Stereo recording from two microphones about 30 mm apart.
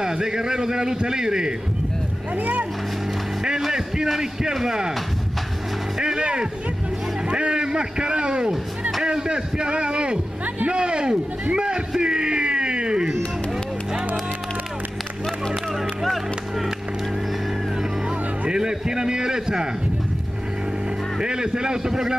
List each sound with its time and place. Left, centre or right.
0.0 s speech: right
2.3 s speech: right
4.2 s speech: centre
5.9 s speech: centre
7.2 s vehicle: right
7.6 s a man's voice: right
12.0 s a sound: right
16.0 s music: centre
18.5 s a man's voice: right
21.2 s speech: right